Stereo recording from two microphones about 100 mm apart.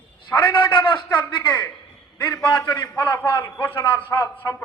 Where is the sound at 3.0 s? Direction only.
20° left (ahead or behind).